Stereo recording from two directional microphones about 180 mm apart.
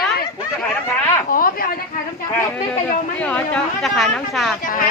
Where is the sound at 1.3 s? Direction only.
50° left (ahead or behind).